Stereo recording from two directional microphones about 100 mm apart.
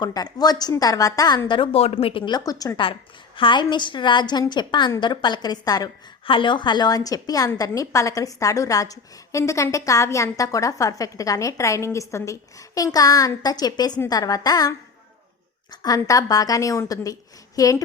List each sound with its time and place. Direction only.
0.0 s a woman's voice: 40° left (ahead or behind)
1.5 s speech: 55° left (ahead or behind)
2.3 s a woman's voice: 35° left (ahead or behind)
2.7 s a woman's voice: 60° left (ahead or behind); by 5.9 s 40° left (ahead or behind)
6.2 s a woman's voice: 60° left (ahead or behind); by 17.8 s 35° left (ahead or behind)